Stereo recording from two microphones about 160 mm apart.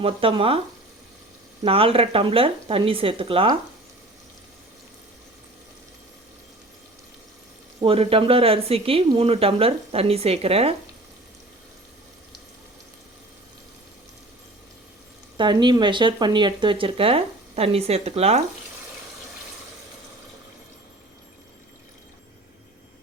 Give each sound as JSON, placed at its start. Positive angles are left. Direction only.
{"t": 0.0, "sound": "speech", "side_deg": -35}
{"t": 1.6, "sound": "speech", "side_deg": -35}
{"t": 7.8, "sound": "speech", "side_deg": -35}
{"t": 15.4, "sound": "speech", "side_deg": -30}